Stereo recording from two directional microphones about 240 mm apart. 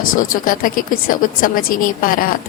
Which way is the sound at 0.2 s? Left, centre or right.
Left.